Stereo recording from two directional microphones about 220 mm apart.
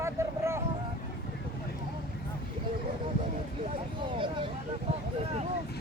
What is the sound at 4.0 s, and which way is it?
Speech, 25° right (ahead or behind).